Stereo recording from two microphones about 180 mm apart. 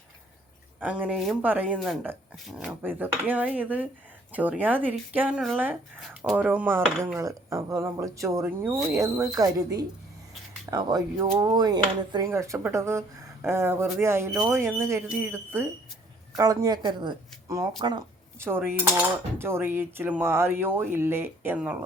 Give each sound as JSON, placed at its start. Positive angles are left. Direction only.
{"t": 0.8, "sound": "speech", "side_deg": -10}
{"t": 10.7, "sound": "speech", "side_deg": -20}